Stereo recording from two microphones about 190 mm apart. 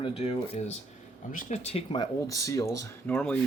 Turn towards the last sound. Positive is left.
turn(degrees=5)  # may be behind; listen again after turning